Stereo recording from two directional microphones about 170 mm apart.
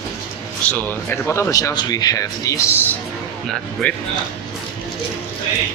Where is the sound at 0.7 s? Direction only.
10° left (ahead or behind).